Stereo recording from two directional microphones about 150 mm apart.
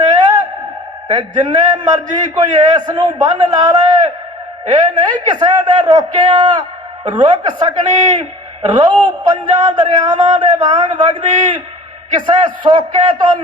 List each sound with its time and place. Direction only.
1.1 s a man's voice: 30° right (ahead or behind)